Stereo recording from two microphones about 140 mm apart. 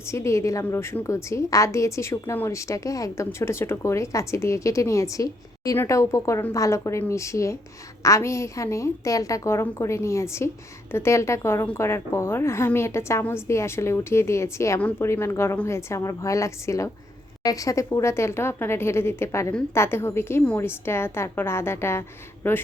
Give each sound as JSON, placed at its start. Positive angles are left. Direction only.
{"t": 0.1, "sound": "a woman's voice", "side_deg": 20}